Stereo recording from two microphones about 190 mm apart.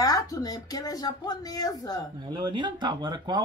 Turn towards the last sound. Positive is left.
turn(degrees=-20)  # may be behind; listen again after turning